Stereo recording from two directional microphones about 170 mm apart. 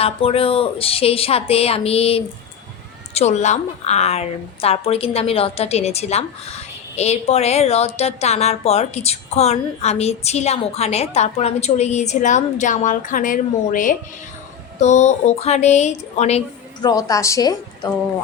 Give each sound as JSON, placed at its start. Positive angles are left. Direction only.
{"t": 0.0, "sound": "a woman's voice", "side_deg": 35}
{"t": 16.8, "sound": "a woman's voice", "side_deg": 20}